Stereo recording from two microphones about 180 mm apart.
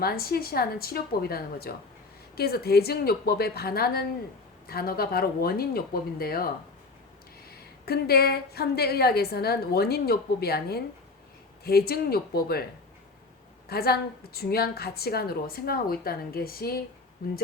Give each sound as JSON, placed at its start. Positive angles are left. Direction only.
{"t": 0.0, "sound": "a woman's voice", "side_deg": 55}
{"t": 7.9, "sound": "a woman's voice", "side_deg": 60}
{"t": 13.7, "sound": "a woman's voice", "side_deg": 60}